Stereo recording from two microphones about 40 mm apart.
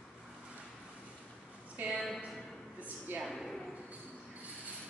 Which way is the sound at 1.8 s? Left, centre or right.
Right.